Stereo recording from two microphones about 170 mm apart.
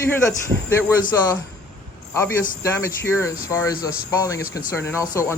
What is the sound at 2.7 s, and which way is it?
Speech, 15° left (ahead or behind).